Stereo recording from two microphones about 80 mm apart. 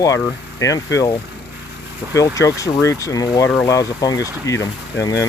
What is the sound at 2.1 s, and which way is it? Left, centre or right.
Speech, left.